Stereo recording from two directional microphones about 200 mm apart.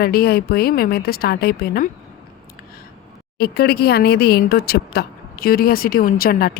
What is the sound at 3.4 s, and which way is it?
Speech, 50° left (ahead or behind).